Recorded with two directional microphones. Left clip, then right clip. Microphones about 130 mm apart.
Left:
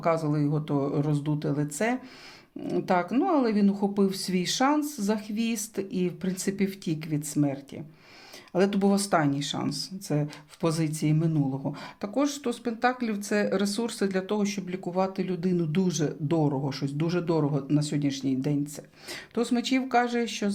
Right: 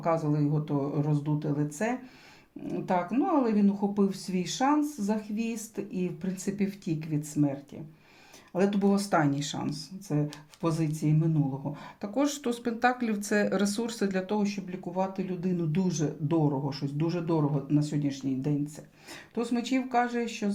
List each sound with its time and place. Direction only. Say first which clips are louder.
0.0 s speech: left 2 dB; 35° left (ahead or behind)
9.0 s speech: left 2 dB; 15° left (ahead or behind)
9.6 s speech: left 4 dB; 35° left (ahead or behind)
12.1 s speech: left 1 dB; 5° left (ahead or behind); by 14.4 s 25° left (ahead or behind)
14.4 s speech: left 3 dB; 40° left (ahead or behind)